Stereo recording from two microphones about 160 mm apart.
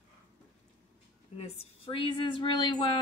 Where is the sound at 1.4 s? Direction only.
35° left (ahead or behind).